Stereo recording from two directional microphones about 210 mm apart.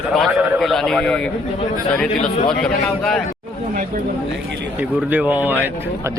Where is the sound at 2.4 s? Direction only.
Centre (ahead or behind).